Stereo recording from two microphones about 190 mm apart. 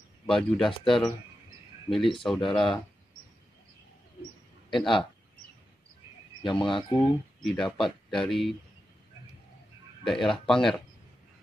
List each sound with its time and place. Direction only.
0.3 s speech: 5° left (ahead or behind)
0.7 s speech: 25° left (ahead or behind)
1.9 s speech: centre (ahead or behind)
4.6 s speech: centre (ahead or behind)
6.4 s speech: 25° left (ahead or behind)
7.5 s speech: centre (ahead or behind)
10.0 s speech: centre (ahead or behind)